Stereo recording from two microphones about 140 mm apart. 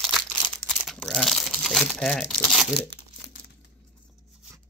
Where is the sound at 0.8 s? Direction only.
5° left (ahead or behind).